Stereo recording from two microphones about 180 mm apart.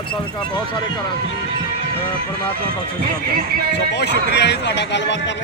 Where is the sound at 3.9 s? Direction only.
70° left (ahead or behind).